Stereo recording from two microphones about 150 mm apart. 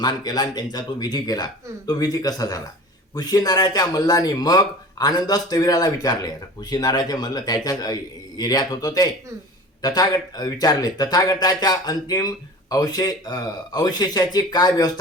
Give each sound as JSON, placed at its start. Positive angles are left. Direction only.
{"t": 0.0, "sound": "speech", "side_deg": 25}